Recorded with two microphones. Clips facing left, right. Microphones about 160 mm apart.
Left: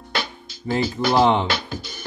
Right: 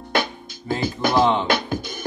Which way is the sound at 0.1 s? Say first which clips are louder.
Right 5 dB; 50° right (ahead or behind).